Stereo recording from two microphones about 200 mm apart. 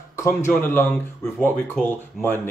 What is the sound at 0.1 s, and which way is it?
Speech, 10° left (ahead or behind).